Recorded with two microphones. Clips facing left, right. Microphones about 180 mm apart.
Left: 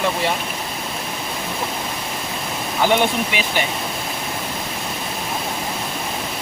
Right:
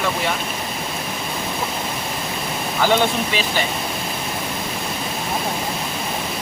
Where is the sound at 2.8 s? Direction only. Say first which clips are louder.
Even; 15° left (ahead or behind).